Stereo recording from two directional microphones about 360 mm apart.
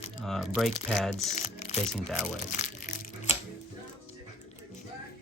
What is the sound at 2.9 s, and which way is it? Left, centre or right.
Crushing, centre.